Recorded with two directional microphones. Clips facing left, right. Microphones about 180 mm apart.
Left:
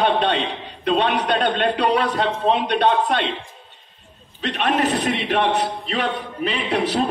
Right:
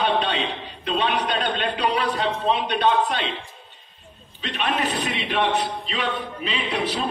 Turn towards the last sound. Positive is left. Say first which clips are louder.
# left 5 dB
turn(degrees=55)  # may be behind; listen again after turning